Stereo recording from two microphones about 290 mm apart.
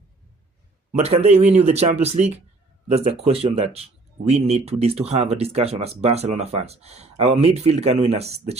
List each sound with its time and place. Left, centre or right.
0.9 s speech: right